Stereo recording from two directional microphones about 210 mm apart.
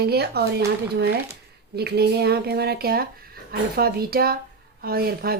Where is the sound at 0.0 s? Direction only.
50° right (ahead or behind).